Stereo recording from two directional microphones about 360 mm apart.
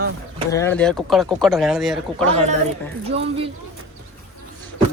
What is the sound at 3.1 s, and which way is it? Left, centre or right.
Speech, centre.